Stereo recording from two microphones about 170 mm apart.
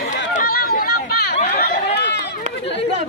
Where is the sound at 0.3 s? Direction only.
60° left (ahead or behind).